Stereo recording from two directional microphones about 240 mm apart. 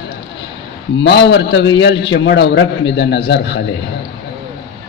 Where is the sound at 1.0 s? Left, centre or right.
Left.